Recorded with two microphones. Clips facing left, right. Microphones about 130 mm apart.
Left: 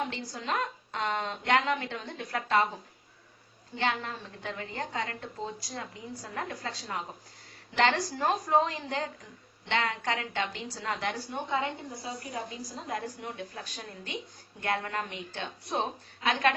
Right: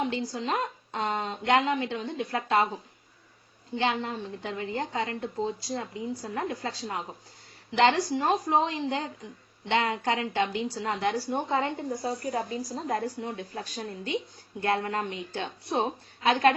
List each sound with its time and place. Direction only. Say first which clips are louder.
0.3 s a woman's voice: right 3 dB; 25° right (ahead or behind)
3.8 s a woman's voice: right 3 dB; 25° right (ahead or behind)
12.0 s a woman's voice: right 6 dB; 40° right (ahead or behind)